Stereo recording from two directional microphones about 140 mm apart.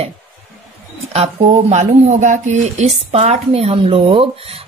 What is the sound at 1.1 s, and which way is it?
Speech, 55° right (ahead or behind).